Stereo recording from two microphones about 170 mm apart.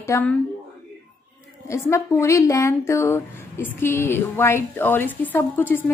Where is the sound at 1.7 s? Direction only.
15° left (ahead or behind).